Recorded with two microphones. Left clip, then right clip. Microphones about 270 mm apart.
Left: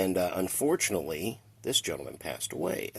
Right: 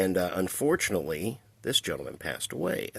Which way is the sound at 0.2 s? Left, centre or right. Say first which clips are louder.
Right 1 dB; right.